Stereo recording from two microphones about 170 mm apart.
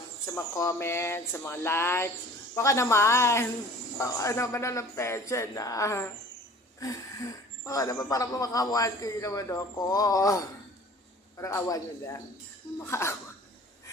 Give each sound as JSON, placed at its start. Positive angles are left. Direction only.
{"t": 0.3, "sound": "speech", "side_deg": 20}